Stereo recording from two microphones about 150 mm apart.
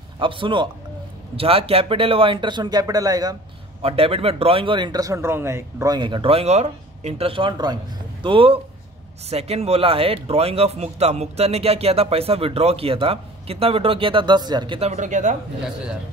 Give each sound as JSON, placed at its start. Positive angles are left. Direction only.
{"t": 0.2, "sound": "speech", "side_deg": -35}
{"t": 3.8, "sound": "speech", "side_deg": -40}
{"t": 5.9, "sound": "speech", "side_deg": -30}
{"t": 14.8, "sound": "speech", "side_deg": -50}